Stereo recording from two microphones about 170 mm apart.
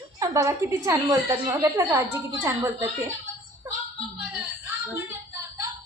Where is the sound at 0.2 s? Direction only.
20° right (ahead or behind).